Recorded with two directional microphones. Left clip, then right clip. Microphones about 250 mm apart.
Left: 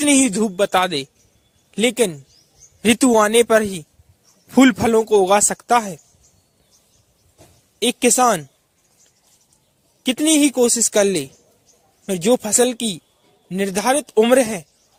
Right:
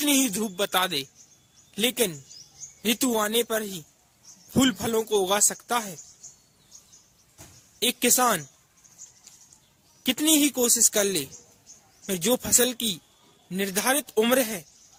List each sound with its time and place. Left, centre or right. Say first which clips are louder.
0.0 s speech: left 8 dB; left
7.8 s speech: left 7 dB; left
10.0 s speech: left 6 dB; left